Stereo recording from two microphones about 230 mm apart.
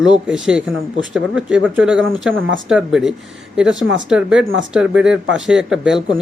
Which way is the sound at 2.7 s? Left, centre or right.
Centre.